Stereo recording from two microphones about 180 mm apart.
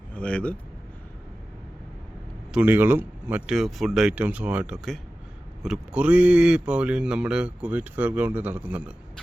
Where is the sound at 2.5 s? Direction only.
10° right (ahead or behind).